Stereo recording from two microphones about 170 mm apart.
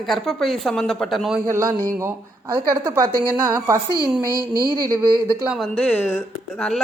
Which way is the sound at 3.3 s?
15° right (ahead or behind).